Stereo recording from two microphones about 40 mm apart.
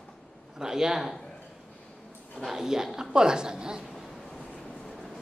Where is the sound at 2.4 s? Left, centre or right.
Centre.